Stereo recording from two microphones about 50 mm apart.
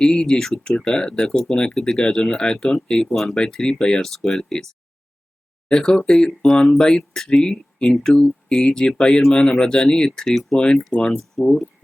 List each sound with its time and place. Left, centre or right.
0.0 s speech: centre
4.1 s speech: centre
5.6 s speech: centre
10.2 s speech: centre
10.9 s speech: left
11.4 s speech: centre